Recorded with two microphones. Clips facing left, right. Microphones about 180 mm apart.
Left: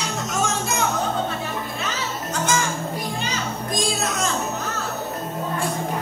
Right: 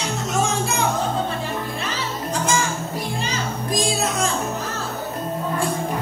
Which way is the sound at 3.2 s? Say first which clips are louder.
Right 1 dB; 30° right (ahead or behind).